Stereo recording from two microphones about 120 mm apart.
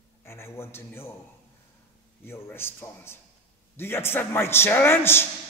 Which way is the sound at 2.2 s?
20° left (ahead or behind).